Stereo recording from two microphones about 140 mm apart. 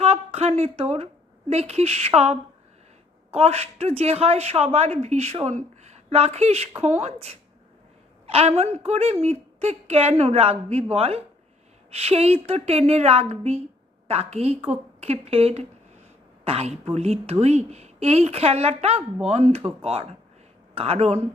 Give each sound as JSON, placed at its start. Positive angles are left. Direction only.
{"t": 0.0, "sound": "a woman's voice", "side_deg": -45}